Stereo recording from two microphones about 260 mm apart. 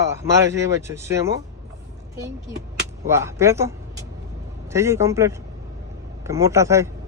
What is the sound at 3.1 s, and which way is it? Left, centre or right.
A man's voice, centre.